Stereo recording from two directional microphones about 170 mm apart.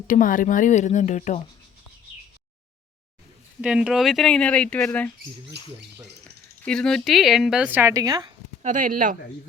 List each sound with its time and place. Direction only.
0.1 s speech: 50° left (ahead or behind)
3.6 s speech: 5° right (ahead or behind)
6.7 s speech: 5° left (ahead or behind); by 8.3 s 20° right (ahead or behind)
8.6 s speech: 50° right (ahead or behind)